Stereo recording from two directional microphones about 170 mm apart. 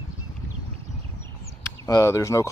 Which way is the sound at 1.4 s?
20° left (ahead or behind).